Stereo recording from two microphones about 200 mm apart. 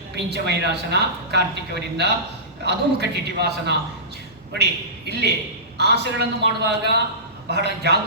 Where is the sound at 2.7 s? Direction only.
55° right (ahead or behind).